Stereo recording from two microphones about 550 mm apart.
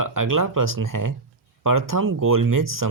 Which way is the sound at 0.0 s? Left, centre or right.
Right.